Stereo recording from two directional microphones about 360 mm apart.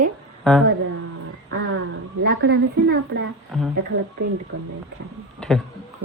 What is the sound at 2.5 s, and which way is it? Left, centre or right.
Speech, right.